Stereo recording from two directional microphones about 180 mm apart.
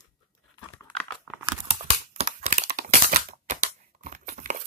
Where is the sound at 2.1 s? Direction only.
35° right (ahead or behind).